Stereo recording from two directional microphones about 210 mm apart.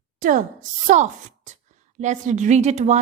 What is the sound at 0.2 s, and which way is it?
Speech, 40° right (ahead or behind).